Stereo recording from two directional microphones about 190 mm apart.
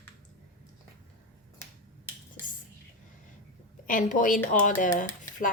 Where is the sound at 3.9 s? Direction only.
45° left (ahead or behind).